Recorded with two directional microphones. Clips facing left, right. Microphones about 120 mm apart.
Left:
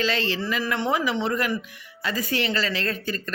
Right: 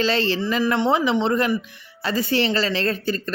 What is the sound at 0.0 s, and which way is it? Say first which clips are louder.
Speech: right 4 dB; 30° right (ahead or behind).